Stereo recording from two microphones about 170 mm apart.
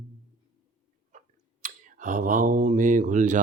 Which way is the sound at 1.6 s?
50° right (ahead or behind).